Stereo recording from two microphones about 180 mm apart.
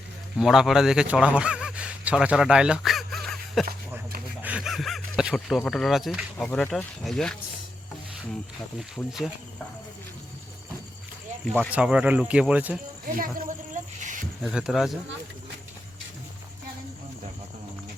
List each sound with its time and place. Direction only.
0.3 s a man's voice: centre (ahead or behind)
4.4 s a sound: 5° right (ahead or behind)
6.3 s speech: 5° left (ahead or behind)
9.0 s speech: 10° left (ahead or behind)
11.7 s speech: 5° right (ahead or behind)
13.1 s speech: 50° right (ahead or behind)
13.7 s a sound: 45° right (ahead or behind)
14.4 s speech: 5° right (ahead or behind)